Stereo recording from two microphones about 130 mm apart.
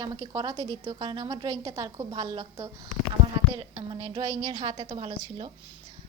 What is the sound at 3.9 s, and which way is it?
A woman's voice, 40° right (ahead or behind).